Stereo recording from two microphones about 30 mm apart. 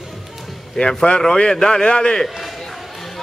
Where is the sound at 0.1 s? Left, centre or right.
Centre.